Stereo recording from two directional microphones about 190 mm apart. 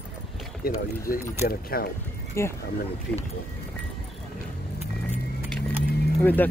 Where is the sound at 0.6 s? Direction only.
50° left (ahead or behind).